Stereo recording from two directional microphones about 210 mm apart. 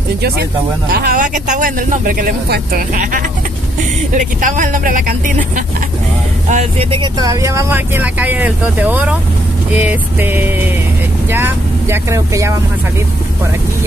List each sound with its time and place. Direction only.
0.9 s speech: 45° right (ahead or behind)
6.5 s speech: 30° right (ahead or behind); by 12.5 s 15° right (ahead or behind)